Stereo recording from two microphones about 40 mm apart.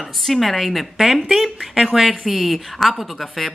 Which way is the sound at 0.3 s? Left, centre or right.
Centre.